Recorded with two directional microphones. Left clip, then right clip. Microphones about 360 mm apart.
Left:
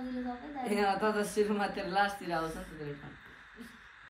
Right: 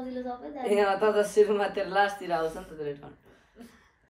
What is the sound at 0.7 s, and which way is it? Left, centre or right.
Speech, centre.